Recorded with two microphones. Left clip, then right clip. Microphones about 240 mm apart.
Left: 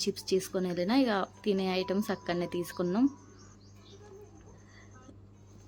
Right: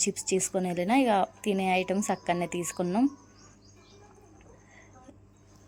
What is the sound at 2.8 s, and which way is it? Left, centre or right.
Speech, centre.